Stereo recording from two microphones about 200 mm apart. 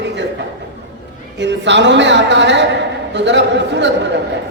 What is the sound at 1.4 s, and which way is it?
A man's voice, 60° right (ahead or behind).